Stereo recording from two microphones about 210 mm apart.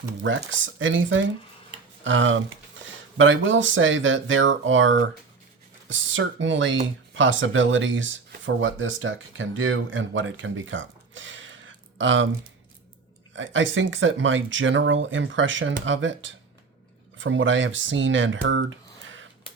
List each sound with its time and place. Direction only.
0.2 s speech: 65° right (ahead or behind)
13.3 s speech: 65° right (ahead or behind)
19.0 s a sound: 65° right (ahead or behind)